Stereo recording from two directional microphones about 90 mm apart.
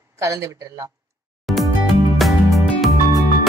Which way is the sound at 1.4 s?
Centre (ahead or behind).